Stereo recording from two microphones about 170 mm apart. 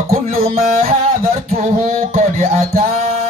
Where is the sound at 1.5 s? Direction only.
55° right (ahead or behind).